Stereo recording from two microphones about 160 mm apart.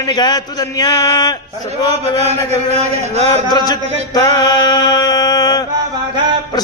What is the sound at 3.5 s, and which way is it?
A man's voice, 25° left (ahead or behind).